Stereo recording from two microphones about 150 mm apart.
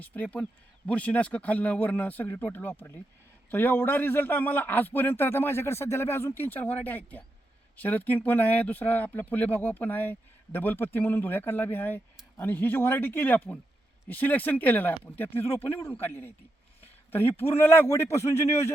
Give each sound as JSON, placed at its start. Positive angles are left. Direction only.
{"t": 0.0, "sound": "speech", "side_deg": 10}